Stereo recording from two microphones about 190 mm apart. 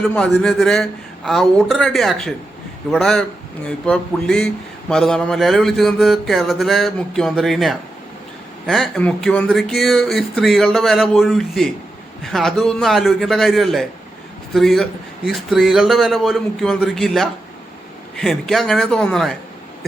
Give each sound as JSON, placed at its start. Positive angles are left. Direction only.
{"t": 0.0, "sound": "speech", "side_deg": 5}